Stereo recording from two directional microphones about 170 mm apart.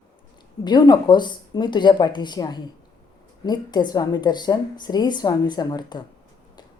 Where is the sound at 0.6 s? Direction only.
25° left (ahead or behind).